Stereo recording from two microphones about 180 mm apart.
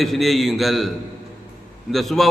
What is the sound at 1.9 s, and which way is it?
Speech, centre (ahead or behind).